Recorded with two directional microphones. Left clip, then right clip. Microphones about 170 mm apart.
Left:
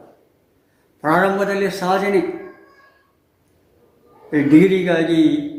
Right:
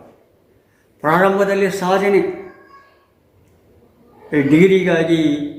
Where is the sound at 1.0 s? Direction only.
15° right (ahead or behind).